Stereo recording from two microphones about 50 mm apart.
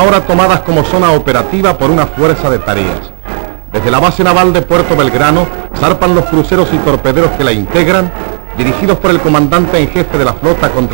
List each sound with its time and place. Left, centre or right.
0.0 s a man's voice: centre